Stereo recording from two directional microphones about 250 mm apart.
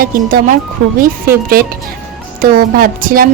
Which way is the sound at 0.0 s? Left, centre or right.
Right.